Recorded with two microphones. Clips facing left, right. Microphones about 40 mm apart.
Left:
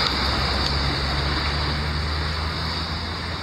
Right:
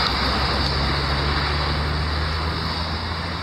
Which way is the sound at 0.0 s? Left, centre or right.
Centre.